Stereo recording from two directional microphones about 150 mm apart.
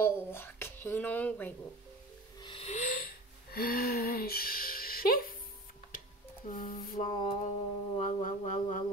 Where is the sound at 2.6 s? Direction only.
55° left (ahead or behind); by 5.3 s 70° left (ahead or behind).